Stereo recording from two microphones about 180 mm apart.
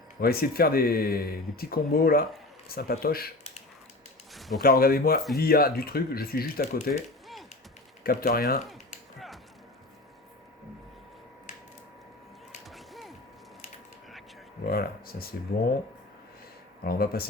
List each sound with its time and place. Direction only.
0.2 s speech: 55° left (ahead or behind)
4.4 s a sound: centre (ahead or behind)
4.6 s speech: 55° left (ahead or behind)
8.0 s speech: 55° left (ahead or behind)
12.6 s a sound: centre (ahead or behind)
14.6 s speech: 55° left (ahead or behind)
16.8 s speech: 55° left (ahead or behind)